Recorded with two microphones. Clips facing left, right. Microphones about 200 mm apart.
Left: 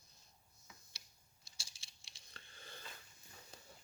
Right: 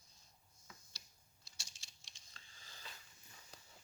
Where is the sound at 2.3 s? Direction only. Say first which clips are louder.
Left 7 dB; 60° left (ahead or behind).